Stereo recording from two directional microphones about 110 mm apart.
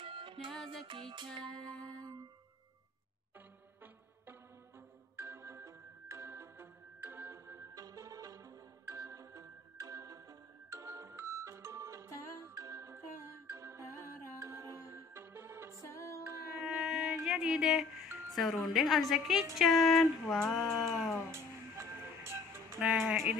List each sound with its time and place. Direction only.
0.0 s music: 50° right (ahead or behind)
1.4 s music: 5° left (ahead or behind)
5.1 s music: 25° right (ahead or behind)
15.8 s music: 25° left (ahead or behind)
16.5 s music: 5° right (ahead or behind)
18.3 s a sound: centre (ahead or behind)
21.3 s music: 25° right (ahead or behind)
22.8 s a sound: 5° right (ahead or behind)